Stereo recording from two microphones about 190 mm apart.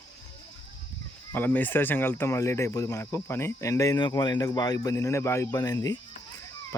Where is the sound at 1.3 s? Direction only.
10° left (ahead or behind).